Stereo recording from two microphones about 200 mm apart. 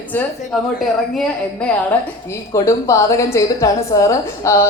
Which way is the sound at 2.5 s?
15° left (ahead or behind).